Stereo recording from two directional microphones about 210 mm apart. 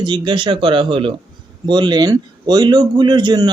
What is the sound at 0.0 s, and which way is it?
A man's voice, 20° right (ahead or behind).